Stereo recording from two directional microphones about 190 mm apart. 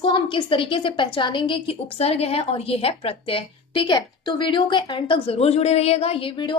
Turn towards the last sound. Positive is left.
turn(degrees=25)  # may be behind; listen again after turning